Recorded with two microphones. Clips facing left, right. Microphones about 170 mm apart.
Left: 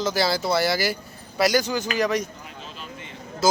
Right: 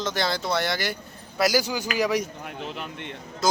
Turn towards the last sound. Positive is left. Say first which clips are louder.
# left 3 dB
turn(degrees=5)  # may be behind; listen again after turning